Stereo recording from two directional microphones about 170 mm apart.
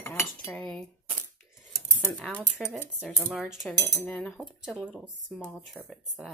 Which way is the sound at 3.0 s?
10° left (ahead or behind).